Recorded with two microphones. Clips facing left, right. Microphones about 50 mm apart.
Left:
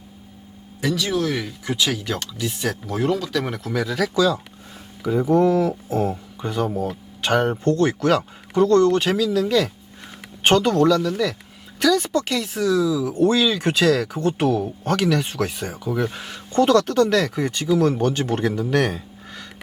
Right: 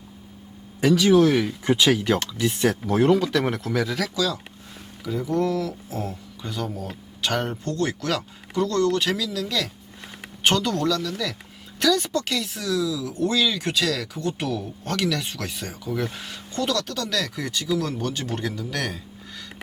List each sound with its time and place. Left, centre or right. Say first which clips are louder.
0.8 s speech: right 6 dB; right
1.6 s speech: right 3 dB; right; by 4.0 s centre
4.1 s speech: left 6 dB; left
11.8 s speech: left 3 dB; centre
12.5 s speech: left 8 dB; left
13.1 s speech: left 4 dB; left
14.8 s speech: left 4 dB; centre
16.5 s speech: left 9 dB; left